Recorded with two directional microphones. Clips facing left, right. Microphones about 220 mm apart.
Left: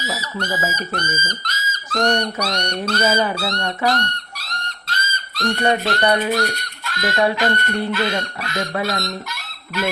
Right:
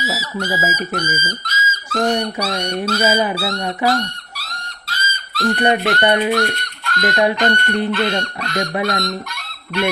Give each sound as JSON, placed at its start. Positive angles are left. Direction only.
{"t": 0.0, "sound": "speech", "side_deg": -5}
{"t": 5.6, "sound": "speech", "side_deg": -15}
{"t": 6.3, "sound": "speech", "side_deg": 0}
{"t": 7.3, "sound": "chicken", "side_deg": 5}
{"t": 7.9, "sound": "speech", "side_deg": 5}
{"t": 8.5, "sound": "speech", "side_deg": -20}
{"t": 8.9, "sound": "chicken", "side_deg": 5}